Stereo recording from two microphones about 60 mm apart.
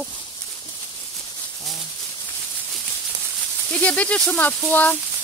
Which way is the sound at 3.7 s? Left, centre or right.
Left.